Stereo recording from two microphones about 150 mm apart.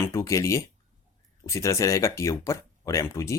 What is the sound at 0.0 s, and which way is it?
Speech, 20° left (ahead or behind).